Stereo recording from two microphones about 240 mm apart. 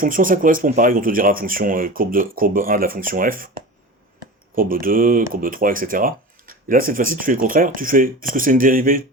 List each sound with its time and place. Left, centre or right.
0.0 s speech: right
4.5 s speech: right